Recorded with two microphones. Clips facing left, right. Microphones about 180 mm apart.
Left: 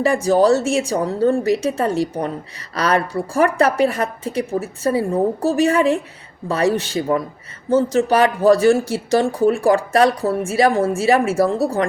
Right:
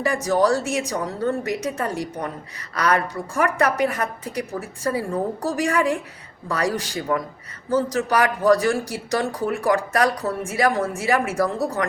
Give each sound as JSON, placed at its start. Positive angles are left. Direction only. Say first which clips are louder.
{"t": 0.0, "sound": "speech", "louder": "left 5 dB", "side_deg": 25}